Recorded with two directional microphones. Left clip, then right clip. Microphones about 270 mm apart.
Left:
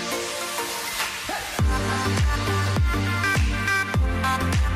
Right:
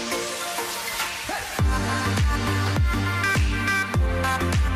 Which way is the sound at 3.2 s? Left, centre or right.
Centre.